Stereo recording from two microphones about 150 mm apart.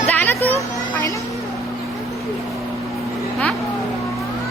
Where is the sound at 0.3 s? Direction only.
45° right (ahead or behind).